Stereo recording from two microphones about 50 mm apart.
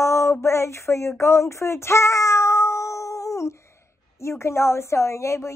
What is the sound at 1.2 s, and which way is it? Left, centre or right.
Meow, left.